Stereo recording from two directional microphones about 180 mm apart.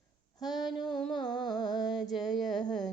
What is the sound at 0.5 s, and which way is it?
Female singing, centre (ahead or behind).